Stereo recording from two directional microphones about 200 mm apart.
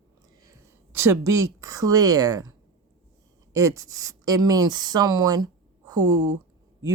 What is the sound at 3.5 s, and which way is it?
Speech, 15° right (ahead or behind).